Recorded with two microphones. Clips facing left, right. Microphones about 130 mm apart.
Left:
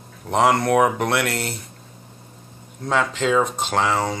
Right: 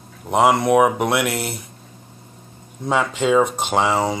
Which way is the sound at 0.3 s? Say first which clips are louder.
Right 2 dB; 10° right (ahead or behind).